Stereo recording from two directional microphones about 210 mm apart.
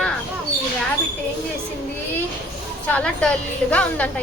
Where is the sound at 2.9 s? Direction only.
5° left (ahead or behind).